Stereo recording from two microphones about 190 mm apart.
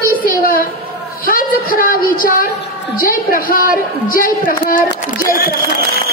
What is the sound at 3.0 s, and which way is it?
A woman's voice, 50° left (ahead or behind).